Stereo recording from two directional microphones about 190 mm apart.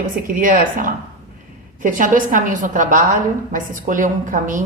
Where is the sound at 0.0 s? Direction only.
45° right (ahead or behind).